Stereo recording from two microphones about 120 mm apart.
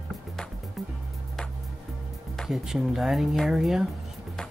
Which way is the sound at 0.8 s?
Centre (ahead or behind).